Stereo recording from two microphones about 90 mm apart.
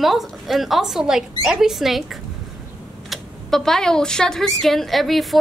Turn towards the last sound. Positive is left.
turn(degrees=0)  # may be behind; listen again after turning